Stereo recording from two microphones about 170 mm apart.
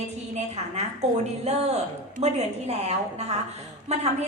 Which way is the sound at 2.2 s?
40° right (ahead or behind).